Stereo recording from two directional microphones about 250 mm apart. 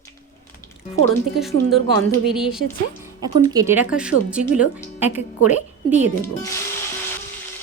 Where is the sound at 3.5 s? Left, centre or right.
Centre.